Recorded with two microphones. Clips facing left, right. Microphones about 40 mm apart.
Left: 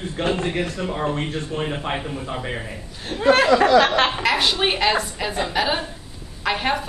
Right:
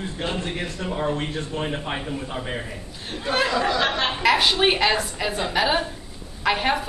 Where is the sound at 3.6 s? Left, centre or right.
Left.